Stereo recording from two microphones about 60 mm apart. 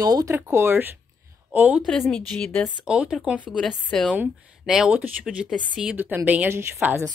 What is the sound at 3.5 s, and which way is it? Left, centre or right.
Speech, centre.